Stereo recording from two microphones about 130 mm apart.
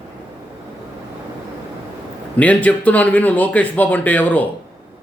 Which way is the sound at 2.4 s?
10° left (ahead or behind).